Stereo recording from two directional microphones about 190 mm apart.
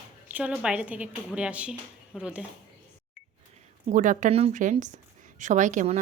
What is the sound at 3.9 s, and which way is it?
A woman's voice, 40° right (ahead or behind).